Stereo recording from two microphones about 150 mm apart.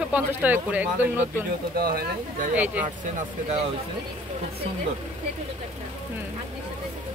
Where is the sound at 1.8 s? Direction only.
80° right.